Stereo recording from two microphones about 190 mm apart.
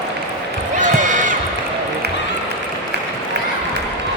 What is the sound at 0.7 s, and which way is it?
Basketball bounce, 40° right (ahead or behind).